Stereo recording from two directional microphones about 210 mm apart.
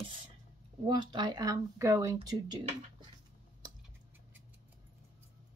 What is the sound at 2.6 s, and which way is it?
Speech, 35° right (ahead or behind).